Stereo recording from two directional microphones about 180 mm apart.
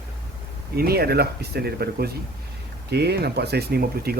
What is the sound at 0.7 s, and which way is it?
Speech, 60° right (ahead or behind).